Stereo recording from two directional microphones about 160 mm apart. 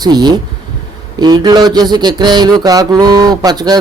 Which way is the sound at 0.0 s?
25° right (ahead or behind).